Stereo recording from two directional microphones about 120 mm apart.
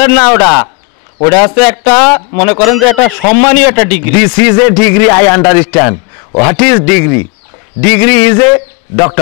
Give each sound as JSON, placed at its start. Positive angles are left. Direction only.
{"t": 0.0, "sound": "a man's voice", "side_deg": 20}